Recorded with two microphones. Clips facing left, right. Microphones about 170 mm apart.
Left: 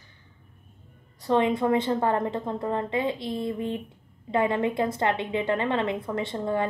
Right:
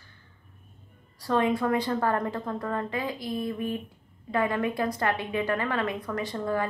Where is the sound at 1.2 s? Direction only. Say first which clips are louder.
Left 2 dB; 20° left (ahead or behind).